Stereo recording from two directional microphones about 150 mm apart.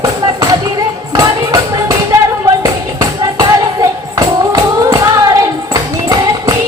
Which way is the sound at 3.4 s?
25° right (ahead or behind).